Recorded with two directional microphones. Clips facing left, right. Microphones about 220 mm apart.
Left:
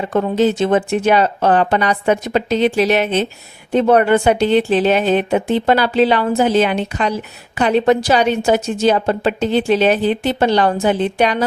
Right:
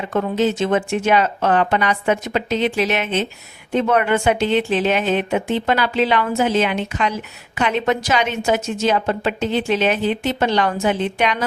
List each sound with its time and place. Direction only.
0.1 s a woman's voice: 35° left (ahead or behind)